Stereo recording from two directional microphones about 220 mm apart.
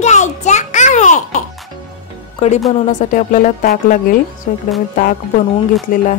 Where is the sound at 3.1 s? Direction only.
35° left (ahead or behind).